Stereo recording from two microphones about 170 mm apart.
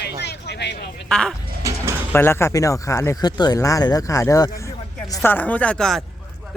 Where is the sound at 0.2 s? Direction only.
80° left.